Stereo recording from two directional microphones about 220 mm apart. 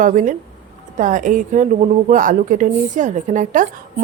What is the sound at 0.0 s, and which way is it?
A woman's voice, 35° right (ahead or behind).